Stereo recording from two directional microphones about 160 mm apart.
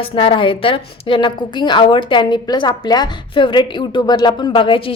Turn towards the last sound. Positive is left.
turn(degrees=30)  # may be behind; listen again after turning